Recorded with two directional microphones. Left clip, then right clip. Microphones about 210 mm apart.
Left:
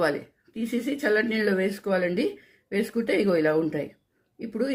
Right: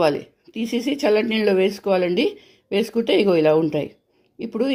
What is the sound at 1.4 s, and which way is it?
Speech, 25° right (ahead or behind).